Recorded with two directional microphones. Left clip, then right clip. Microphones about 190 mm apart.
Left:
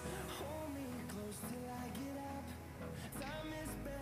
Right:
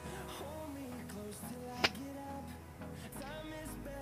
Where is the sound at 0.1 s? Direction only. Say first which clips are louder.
Right 1 dB; centre (ahead or behind).